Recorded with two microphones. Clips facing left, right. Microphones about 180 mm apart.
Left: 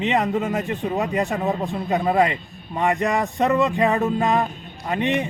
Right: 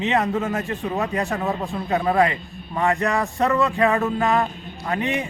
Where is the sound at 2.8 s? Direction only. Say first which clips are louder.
Even; 20° left (ahead or behind).